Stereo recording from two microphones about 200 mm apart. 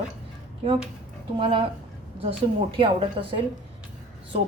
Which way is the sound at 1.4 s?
25° right (ahead or behind).